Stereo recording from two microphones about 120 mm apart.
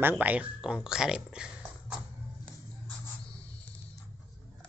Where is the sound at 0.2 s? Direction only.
10° right (ahead or behind).